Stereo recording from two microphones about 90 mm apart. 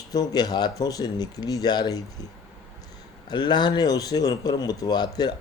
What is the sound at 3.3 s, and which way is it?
Speech, 55° left (ahead or behind).